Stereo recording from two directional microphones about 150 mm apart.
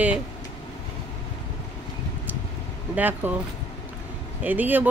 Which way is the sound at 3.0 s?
10° right (ahead or behind).